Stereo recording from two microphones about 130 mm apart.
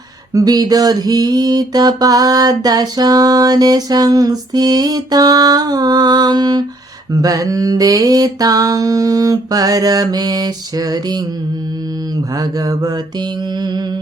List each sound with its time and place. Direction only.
0.3 s mantra: 30° right (ahead or behind)
12.4 s mantra: 30° right (ahead or behind)